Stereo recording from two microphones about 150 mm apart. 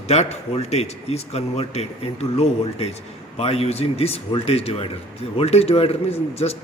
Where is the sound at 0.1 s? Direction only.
45° left (ahead or behind).